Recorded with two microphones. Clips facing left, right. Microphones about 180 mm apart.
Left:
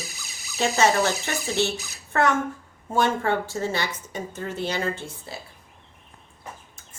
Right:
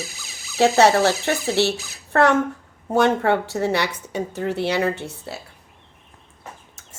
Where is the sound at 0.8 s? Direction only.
65° right (ahead or behind).